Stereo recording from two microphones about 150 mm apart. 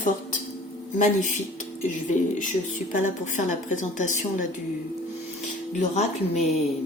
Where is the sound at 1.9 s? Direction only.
55° left (ahead or behind).